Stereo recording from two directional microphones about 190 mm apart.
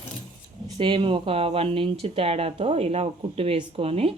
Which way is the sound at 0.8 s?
25° right (ahead or behind).